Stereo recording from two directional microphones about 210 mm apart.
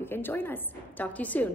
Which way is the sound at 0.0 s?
10° left (ahead or behind).